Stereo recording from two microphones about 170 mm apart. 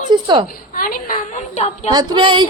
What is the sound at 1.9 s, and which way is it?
Speech, 25° right (ahead or behind).